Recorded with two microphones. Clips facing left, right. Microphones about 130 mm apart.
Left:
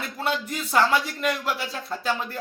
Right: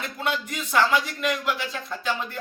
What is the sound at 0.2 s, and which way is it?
Speech, 35° left (ahead or behind).